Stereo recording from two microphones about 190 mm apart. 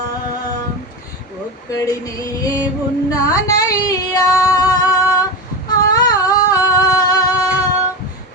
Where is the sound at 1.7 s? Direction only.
20° left (ahead or behind).